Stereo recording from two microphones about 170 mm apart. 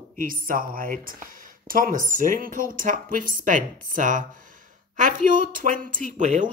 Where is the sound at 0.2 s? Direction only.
55° right (ahead or behind).